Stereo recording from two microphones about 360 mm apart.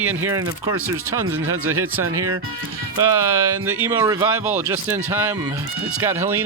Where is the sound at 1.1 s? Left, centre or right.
Right.